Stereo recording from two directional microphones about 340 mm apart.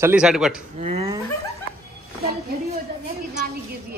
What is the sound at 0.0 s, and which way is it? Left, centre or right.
Speech, centre.